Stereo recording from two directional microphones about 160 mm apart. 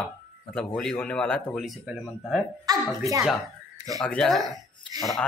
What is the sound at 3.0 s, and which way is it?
Speech, 20° right (ahead or behind).